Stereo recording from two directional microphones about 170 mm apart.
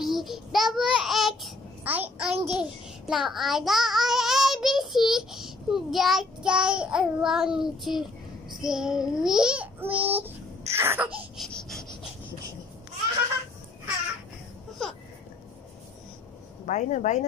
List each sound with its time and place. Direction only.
0.0 s a child's voice: centre (ahead or behind)
3.1 s child singing: centre (ahead or behind)
10.0 s a child's voice: 10° right (ahead or behind)
11.1 s a sound: centre (ahead or behind)
16.6 s speech: 45° left (ahead or behind)